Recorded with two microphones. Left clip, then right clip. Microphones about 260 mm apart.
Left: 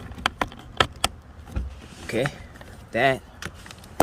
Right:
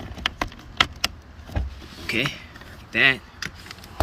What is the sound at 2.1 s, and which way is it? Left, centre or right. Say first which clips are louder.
Speech: right 1 dB; left.